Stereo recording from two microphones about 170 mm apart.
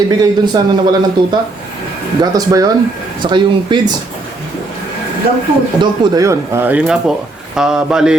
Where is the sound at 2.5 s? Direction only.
20° right (ahead or behind).